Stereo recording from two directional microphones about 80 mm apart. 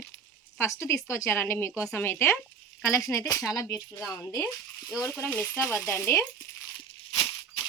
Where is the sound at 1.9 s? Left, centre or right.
Left.